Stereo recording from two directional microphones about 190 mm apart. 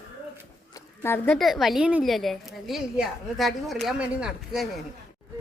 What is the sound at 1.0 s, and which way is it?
A woman's voice, 10° left (ahead or behind).